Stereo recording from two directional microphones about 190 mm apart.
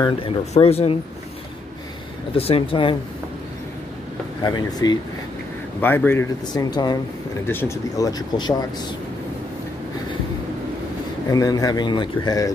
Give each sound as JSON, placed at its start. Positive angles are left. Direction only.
{"t": 0.0, "sound": "speech", "side_deg": 30}
{"t": 2.3, "sound": "a man's voice", "side_deg": 30}
{"t": 4.4, "sound": "a man's voice", "side_deg": 20}
{"t": 5.8, "sound": "a man's voice", "side_deg": 10}
{"t": 11.2, "sound": "a man's voice", "side_deg": 20}